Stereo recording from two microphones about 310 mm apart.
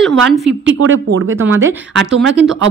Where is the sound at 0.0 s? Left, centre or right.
Centre.